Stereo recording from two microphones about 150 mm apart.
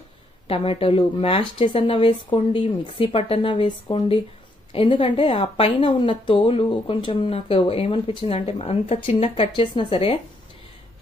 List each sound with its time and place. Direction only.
0.5 s a woman's voice: 40° left (ahead or behind)